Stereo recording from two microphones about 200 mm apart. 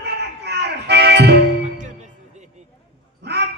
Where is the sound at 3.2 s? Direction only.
55° right (ahead or behind).